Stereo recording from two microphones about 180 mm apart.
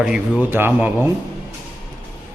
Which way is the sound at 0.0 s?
10° right (ahead or behind).